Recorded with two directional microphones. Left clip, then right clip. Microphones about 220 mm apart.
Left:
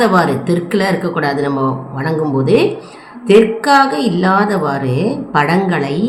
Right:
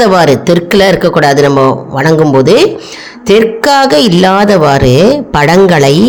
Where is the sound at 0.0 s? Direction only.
40° right (ahead or behind).